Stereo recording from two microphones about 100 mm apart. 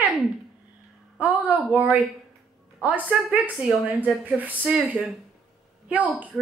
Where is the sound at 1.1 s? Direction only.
15° right (ahead or behind).